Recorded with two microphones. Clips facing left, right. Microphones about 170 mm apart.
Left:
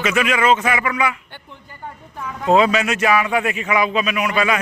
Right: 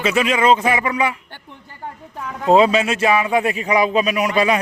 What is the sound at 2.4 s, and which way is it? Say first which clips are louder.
A man's voice: right 2 dB; 30° right (ahead or behind).